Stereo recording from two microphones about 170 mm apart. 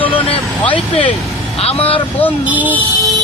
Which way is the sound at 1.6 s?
35° left (ahead or behind).